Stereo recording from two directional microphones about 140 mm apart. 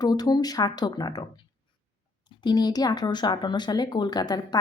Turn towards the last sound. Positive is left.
turn(degrees=30)  # may be behind; listen again after turning